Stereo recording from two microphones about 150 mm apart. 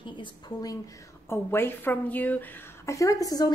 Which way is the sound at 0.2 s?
25° left (ahead or behind).